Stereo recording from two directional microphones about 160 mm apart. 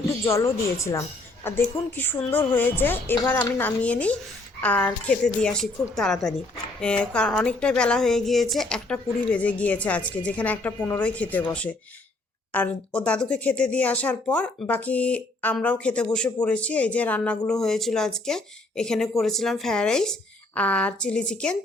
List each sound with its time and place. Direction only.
0.3 s a woman's voice: 20° left (ahead or behind)